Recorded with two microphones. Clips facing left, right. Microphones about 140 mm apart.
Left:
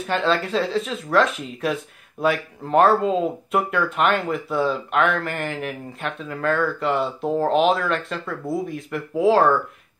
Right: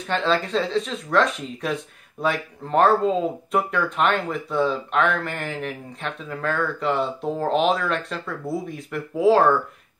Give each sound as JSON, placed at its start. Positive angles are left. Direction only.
{"t": 0.0, "sound": "speech", "side_deg": 0}